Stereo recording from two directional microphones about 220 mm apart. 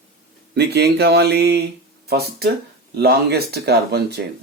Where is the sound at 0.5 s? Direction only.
50° right (ahead or behind).